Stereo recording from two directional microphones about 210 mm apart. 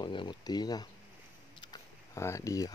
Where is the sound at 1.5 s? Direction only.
15° left (ahead or behind).